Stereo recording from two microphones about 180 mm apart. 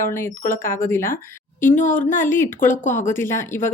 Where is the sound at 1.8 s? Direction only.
45° left (ahead or behind).